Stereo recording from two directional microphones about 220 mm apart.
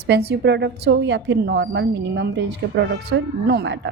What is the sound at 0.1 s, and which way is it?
A woman's voice, 50° right (ahead or behind).